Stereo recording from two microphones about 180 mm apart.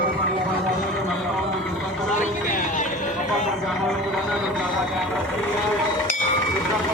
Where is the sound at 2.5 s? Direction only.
45° left (ahead or behind).